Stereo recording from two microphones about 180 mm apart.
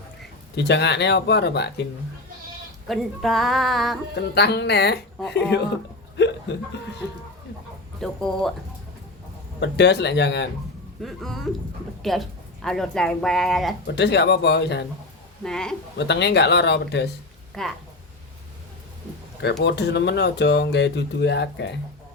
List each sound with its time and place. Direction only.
0.5 s speech: 70° left (ahead or behind)
2.8 s speech: centre (ahead or behind)
4.1 s speech: 70° left (ahead or behind)
6.1 s hiccup: 75° left (ahead or behind)
8.0 s speech: 5° left (ahead or behind)
9.6 s speech: 75° left (ahead or behind)
11.0 s speech: centre (ahead or behind)
13.8 s speech: 70° left (ahead or behind)
15.4 s speech: 5° left (ahead or behind)
16.0 s speech: 70° left (ahead or behind)
17.5 s speech: centre (ahead or behind)
19.6 s speech: 70° left (ahead or behind)